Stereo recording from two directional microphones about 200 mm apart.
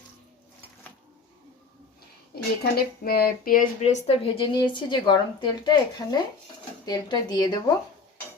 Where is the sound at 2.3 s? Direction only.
50° left (ahead or behind); by 7.6 s 20° left (ahead or behind).